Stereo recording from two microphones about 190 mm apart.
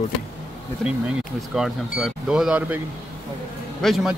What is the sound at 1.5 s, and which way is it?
Speech, centre (ahead or behind).